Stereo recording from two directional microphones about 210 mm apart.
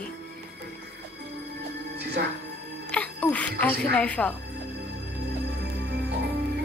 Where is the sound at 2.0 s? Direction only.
50° right (ahead or behind).